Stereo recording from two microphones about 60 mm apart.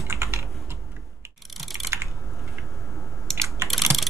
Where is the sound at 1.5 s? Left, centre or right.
Centre.